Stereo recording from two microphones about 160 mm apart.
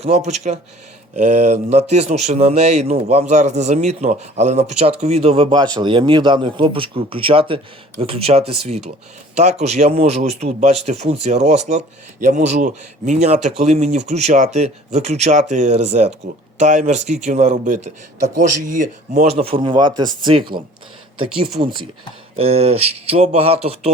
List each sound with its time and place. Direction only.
0.0 s speech: 40° right (ahead or behind)